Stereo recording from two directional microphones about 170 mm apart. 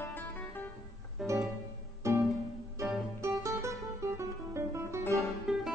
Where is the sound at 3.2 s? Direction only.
20° right (ahead or behind).